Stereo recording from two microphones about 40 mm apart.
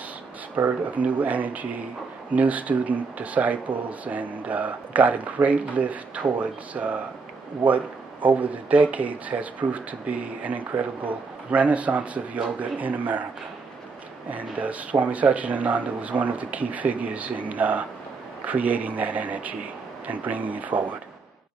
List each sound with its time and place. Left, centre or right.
0.6 s speech: right
14.3 s speech: right